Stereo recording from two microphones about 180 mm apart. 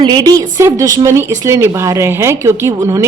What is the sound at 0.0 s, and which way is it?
A woman's voice, 25° right (ahead or behind).